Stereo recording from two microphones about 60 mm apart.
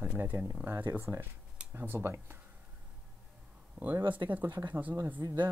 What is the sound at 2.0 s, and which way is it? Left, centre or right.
Speech, right.